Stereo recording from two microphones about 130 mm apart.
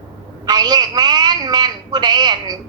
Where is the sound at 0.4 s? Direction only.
30° right (ahead or behind).